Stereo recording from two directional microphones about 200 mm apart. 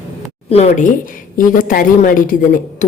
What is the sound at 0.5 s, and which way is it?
Speech, 30° left (ahead or behind).